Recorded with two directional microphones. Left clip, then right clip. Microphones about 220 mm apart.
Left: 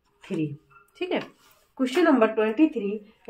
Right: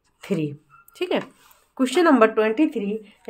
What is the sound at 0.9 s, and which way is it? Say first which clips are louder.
Speech: right 4 dB; 40° right (ahead or behind).